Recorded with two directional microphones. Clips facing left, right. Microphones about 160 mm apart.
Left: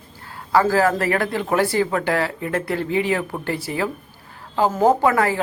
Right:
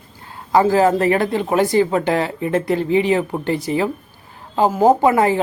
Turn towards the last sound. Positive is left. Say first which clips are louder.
# right 4 dB
turn(degrees=-20)  # may be behind; listen again after turning